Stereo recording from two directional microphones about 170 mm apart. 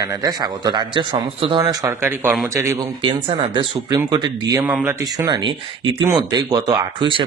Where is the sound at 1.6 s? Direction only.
20° right (ahead or behind).